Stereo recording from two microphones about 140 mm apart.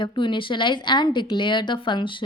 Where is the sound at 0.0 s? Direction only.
35° left (ahead or behind).